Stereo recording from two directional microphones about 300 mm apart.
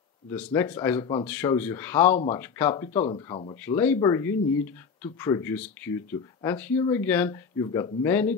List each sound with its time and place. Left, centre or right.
0.3 s speech: centre